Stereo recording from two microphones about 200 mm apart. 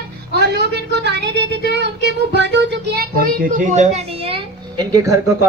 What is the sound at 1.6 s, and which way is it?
Child singing, 60° right (ahead or behind).